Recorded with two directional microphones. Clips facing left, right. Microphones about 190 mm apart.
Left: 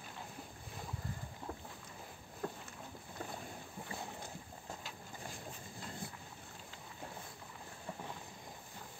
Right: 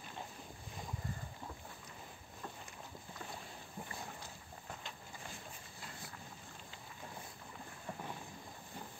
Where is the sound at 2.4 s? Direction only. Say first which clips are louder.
Left 7 dB; 60° left (ahead or behind).